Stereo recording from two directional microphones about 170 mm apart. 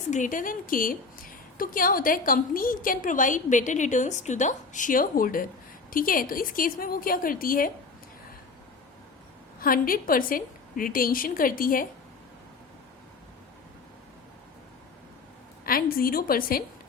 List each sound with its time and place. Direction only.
0.1 s a woman's voice: 50° left (ahead or behind)
9.6 s a woman's voice: 55° left (ahead or behind)
15.6 s a woman's voice: 60° left (ahead or behind)